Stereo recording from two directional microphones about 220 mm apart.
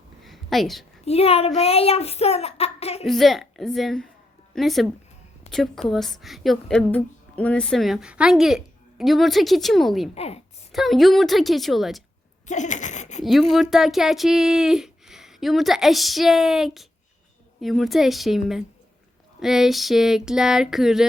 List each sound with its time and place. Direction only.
0.3 s a sound: centre (ahead or behind)
1.0 s a child's voice: 25° left (ahead or behind)
3.1 s a woman's voice: centre (ahead or behind)
10.2 s a child's voice: 30° left (ahead or behind)
10.7 s a woman's voice: centre (ahead or behind)
12.5 s speech: 35° left (ahead or behind)
13.5 s a woman's voice: centre (ahead or behind)